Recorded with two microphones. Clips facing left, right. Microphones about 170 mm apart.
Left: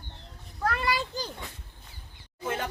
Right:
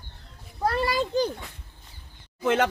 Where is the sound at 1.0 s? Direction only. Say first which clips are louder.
Right 11 dB; 60° right (ahead or behind).